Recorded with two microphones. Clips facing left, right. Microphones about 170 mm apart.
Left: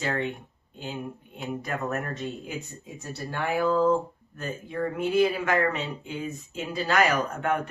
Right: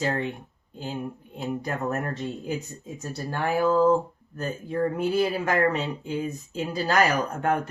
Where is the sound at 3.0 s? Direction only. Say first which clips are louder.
Right 2 dB; 40° right (ahead or behind).